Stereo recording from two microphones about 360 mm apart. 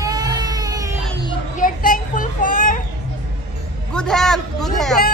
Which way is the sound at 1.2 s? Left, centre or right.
Centre.